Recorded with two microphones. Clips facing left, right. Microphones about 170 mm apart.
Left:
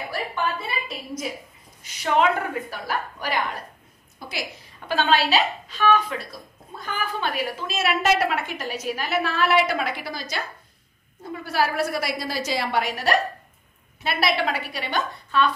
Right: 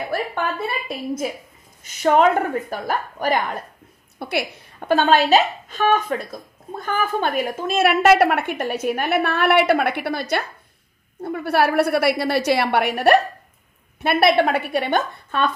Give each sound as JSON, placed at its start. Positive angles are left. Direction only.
{"t": 0.1, "sound": "a woman's voice", "side_deg": -55}
{"t": 4.2, "sound": "a woman's voice", "side_deg": -65}